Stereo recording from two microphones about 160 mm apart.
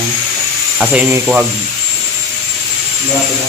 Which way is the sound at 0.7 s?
5° right (ahead or behind).